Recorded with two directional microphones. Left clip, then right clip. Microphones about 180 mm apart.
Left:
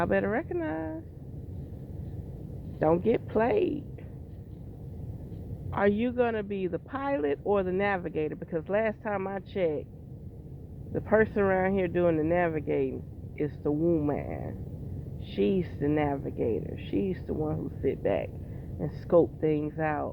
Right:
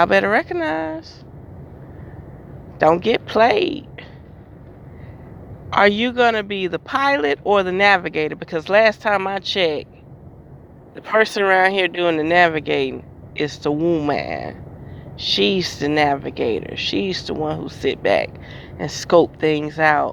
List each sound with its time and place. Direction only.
0.0 s speech: 30° right (ahead or behind)
2.7 s speech: 20° right (ahead or behind)
5.7 s speech: 25° right (ahead or behind)
11.0 s speech: 30° right (ahead or behind)